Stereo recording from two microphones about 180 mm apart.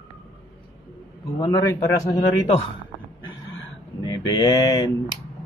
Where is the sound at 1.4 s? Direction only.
20° left (ahead or behind).